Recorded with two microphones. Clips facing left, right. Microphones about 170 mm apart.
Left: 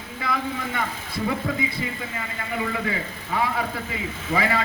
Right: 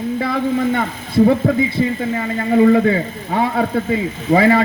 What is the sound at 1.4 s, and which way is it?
A man's voice, 40° right (ahead or behind).